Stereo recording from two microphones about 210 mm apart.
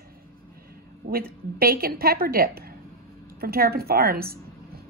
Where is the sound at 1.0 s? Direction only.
45° right (ahead or behind).